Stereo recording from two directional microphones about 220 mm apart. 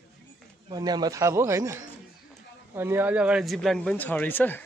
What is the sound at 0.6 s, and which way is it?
A man's voice, 20° right (ahead or behind).